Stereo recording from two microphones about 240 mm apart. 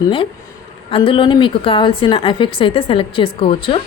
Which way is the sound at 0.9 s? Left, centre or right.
Left.